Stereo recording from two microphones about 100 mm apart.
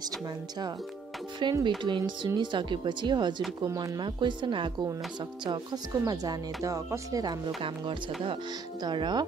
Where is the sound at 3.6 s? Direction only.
35° right (ahead or behind).